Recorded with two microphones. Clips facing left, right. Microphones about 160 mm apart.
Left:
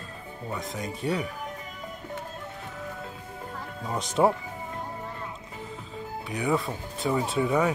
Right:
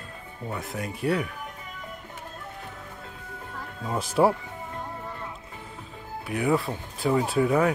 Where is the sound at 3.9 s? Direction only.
5° right (ahead or behind).